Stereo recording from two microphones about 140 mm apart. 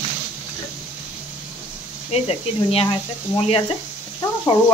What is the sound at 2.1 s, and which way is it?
Speech, 45° left (ahead or behind).